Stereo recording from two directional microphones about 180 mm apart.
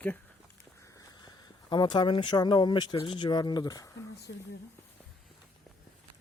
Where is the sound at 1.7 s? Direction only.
25° left (ahead or behind).